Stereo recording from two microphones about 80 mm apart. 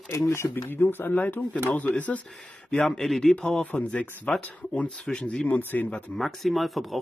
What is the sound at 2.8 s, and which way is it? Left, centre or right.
Speech, centre.